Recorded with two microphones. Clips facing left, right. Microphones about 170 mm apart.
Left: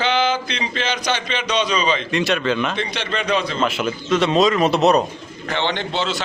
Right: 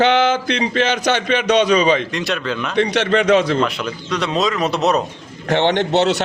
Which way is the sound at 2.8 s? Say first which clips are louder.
Right 9 dB; 70° right (ahead or behind).